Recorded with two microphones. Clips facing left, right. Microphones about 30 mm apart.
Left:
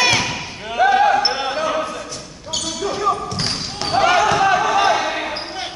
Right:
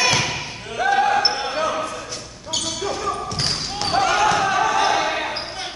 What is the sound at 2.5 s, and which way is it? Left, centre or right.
Basketball bounce, centre.